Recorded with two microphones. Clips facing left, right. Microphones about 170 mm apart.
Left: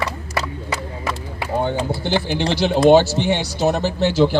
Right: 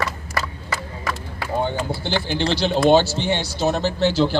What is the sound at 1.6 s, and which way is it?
Speech, 15° left (ahead or behind).